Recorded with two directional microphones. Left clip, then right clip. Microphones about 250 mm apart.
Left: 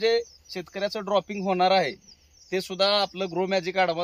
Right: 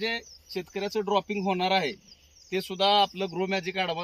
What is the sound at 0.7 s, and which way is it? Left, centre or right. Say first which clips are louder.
Speech: left 2 dB; centre.